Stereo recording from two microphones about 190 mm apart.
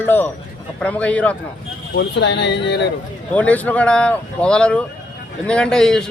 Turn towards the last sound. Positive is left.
turn(degrees=5)  # may be behind; listen again after turning